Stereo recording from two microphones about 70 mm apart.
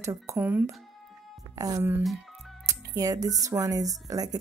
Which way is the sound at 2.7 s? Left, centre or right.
Right.